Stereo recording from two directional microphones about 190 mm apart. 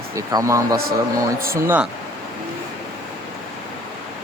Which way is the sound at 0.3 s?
15° right (ahead or behind).